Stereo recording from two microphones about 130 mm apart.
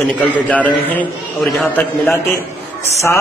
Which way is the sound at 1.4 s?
Centre (ahead or behind).